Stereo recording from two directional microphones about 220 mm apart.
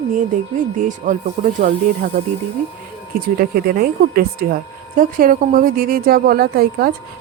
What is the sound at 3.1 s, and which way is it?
Speech, 40° right (ahead or behind).